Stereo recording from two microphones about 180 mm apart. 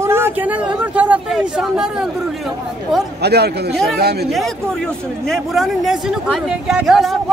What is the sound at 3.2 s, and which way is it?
A man's voice, 65° right (ahead or behind).